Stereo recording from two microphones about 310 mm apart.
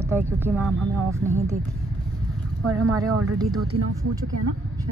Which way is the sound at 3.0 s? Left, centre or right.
Right.